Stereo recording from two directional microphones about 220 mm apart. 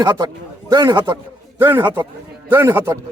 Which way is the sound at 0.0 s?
20° right (ahead or behind).